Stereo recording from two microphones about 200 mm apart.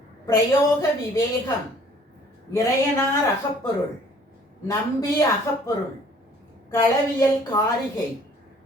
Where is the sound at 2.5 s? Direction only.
15° left (ahead or behind).